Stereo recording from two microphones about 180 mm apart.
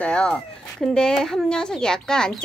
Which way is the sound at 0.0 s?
5° left (ahead or behind).